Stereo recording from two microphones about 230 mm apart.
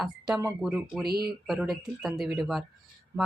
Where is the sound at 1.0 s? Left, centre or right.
Right.